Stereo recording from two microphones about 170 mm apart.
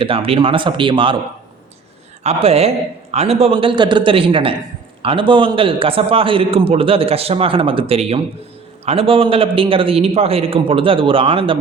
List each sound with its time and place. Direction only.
0.0 s a man's voice: 30° right (ahead or behind)
2.2 s a man's voice: 35° right (ahead or behind)